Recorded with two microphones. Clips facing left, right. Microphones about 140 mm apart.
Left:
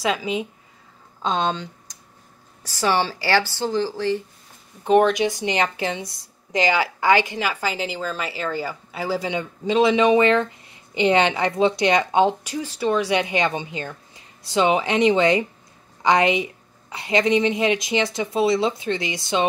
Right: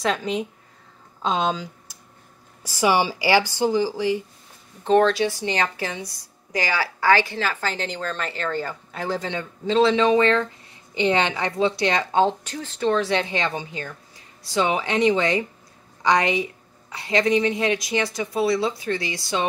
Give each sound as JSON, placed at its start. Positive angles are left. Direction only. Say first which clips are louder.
{"t": 0.0, "sound": "a woman's voice", "louder": "even", "side_deg": 5}
{"t": 4.8, "sound": "a woman's voice", "louder": "left 1 dB", "side_deg": 15}